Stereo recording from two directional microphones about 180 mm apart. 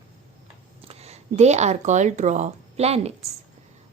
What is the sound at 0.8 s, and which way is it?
A woman's voice, 35° right (ahead or behind).